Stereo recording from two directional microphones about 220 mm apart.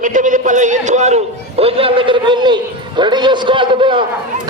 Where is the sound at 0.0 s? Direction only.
35° right (ahead or behind).